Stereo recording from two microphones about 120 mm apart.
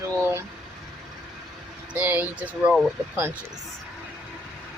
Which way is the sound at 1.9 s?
15° right (ahead or behind).